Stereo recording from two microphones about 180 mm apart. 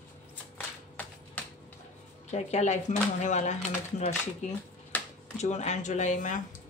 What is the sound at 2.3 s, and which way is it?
Speech, 40° left (ahead or behind).